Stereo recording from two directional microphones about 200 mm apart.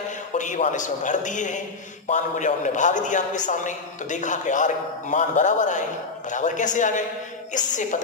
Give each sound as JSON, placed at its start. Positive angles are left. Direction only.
{"t": 0.3, "sound": "a man's voice", "side_deg": 35}